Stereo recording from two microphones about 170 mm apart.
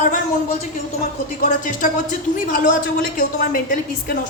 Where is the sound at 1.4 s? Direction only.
50° left (ahead or behind).